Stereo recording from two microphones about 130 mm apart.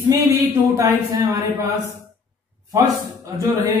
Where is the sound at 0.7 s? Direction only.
25° right (ahead or behind).